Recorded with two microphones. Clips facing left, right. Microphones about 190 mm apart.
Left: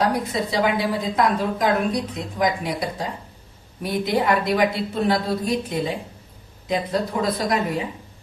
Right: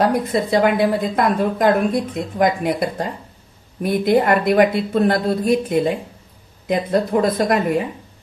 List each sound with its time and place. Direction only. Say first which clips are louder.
0.0 s a woman's voice: right 4 dB; 50° right (ahead or behind)